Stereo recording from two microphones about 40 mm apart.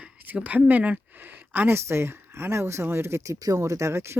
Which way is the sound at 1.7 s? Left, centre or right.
Right.